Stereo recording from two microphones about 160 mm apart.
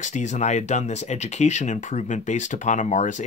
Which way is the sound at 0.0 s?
50° left (ahead or behind).